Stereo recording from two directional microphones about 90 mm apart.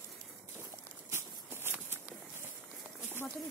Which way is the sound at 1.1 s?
25° right (ahead or behind).